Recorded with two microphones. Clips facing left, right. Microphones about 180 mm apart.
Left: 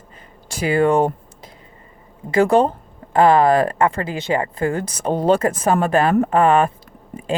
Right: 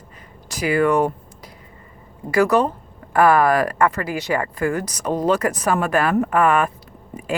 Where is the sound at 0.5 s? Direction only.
30° left (ahead or behind).